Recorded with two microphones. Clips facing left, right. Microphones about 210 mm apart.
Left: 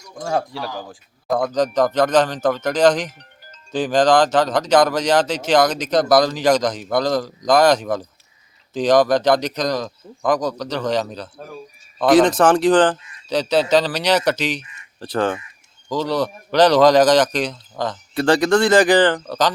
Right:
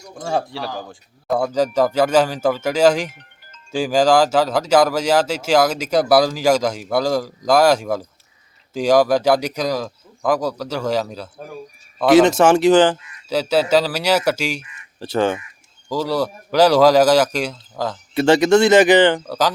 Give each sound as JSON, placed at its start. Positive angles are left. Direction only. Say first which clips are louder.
{"t": 0.1, "sound": "a man's voice", "louder": "even", "side_deg": 0}
{"t": 15.9, "sound": "speech", "louder": "even", "side_deg": -10}
{"t": 18.3, "sound": "speech", "louder": "right 3 dB", "side_deg": -25}